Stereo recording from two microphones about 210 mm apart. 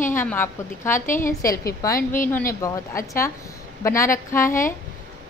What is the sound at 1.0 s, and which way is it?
Speech, 40° left (ahead or behind).